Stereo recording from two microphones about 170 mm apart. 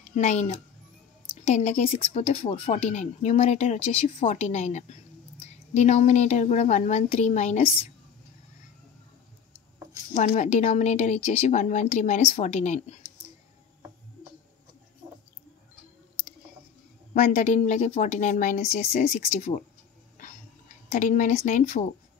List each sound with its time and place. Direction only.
0.0 s a woman's voice: 45° left (ahead or behind)
10.1 s a woman's voice: 45° left (ahead or behind)
17.1 s a woman's voice: 45° left (ahead or behind)
20.2 s a sound: 45° left (ahead or behind)